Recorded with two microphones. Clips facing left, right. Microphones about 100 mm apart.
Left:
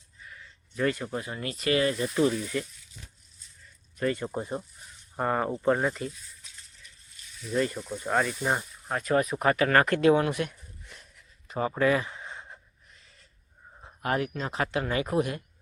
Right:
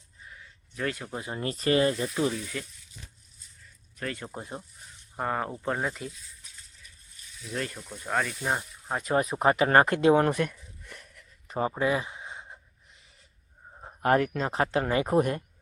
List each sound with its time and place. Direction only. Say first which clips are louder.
0.8 s speech: left 5 dB; centre (ahead or behind)
1.1 s speech: right 1 dB; 25° right (ahead or behind)
2.3 s speech: left 4 dB; centre (ahead or behind)
3.9 s speech: left 7 dB; 5° left (ahead or behind)
7.4 s speech: left 6 dB; 5° left (ahead or behind)
8.9 s speech: left 1 dB; 20° right (ahead or behind)
10.2 s speech: right 3 dB; 45° right (ahead or behind)
10.5 s a sound: right 3 dB; 65° right (ahead or behind)
11.4 s a sound: right 1 dB; 30° right (ahead or behind)
11.7 s a sound: left 2 dB; 20° right (ahead or behind)
13.8 s speech: right 5 dB; 45° right (ahead or behind)